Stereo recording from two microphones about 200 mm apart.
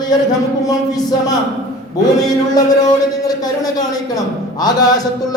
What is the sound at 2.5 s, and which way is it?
A man's voice, 20° left (ahead or behind).